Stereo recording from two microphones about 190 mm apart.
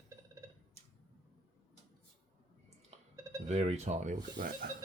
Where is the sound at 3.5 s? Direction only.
35° right (ahead or behind); by 4.7 s 50° right (ahead or behind).